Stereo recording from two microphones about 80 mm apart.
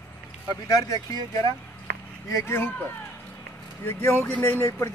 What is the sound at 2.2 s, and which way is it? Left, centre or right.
Speech, left.